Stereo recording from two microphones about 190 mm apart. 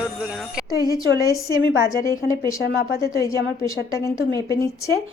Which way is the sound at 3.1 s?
20° left (ahead or behind).